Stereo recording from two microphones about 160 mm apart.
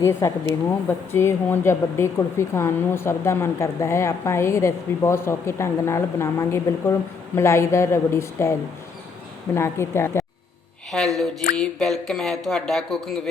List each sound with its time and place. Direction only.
0.0 s a woman's voice: 15° left (ahead or behind)
9.6 s a woman's voice: 15° left (ahead or behind)
10.9 s speech: centre (ahead or behind)